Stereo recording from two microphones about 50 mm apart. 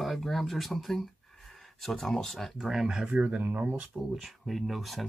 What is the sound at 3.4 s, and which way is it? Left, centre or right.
Speech, right.